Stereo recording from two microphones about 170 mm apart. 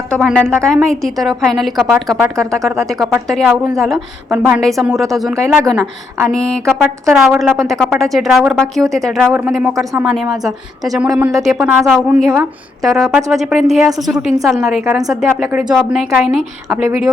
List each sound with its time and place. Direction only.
0.1 s a woman's voice: centre (ahead or behind)
2.3 s speech: 20° right (ahead or behind)
2.6 s a woman's voice: centre (ahead or behind)